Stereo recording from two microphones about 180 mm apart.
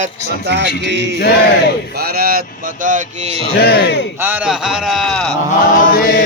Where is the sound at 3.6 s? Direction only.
65° left (ahead or behind).